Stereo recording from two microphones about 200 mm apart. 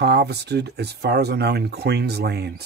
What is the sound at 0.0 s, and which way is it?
Speech, 55° right (ahead or behind).